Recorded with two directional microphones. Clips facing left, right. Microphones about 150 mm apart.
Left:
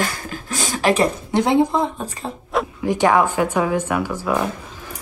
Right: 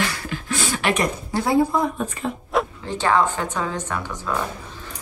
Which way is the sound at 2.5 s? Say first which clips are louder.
Even; centre (ahead or behind).